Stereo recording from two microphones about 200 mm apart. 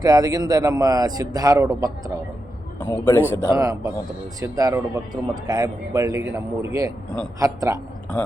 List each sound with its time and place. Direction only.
0.0 s a man's voice: 20° right (ahead or behind)
2.8 s a man's voice: 10° left (ahead or behind)
3.5 s a man's voice: 15° right (ahead or behind)
8.1 s a man's voice: 5° left (ahead or behind)